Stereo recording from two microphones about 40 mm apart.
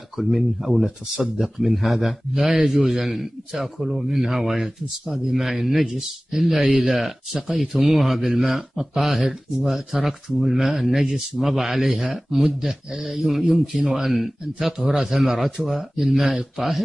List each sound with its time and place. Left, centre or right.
0.2 s speech: centre
6.6 s speech: centre
6.9 s speech: centre
13.0 s speech: centre
13.7 s speech: right
14.0 s speech: centre